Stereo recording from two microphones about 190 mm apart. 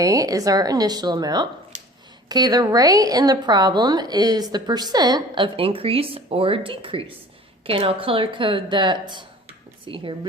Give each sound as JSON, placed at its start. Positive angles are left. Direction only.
{"t": 0.0, "sound": "a woman's voice", "side_deg": -20}